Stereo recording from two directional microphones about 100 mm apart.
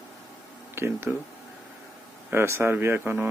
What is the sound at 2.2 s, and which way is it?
Speech, 25° right (ahead or behind).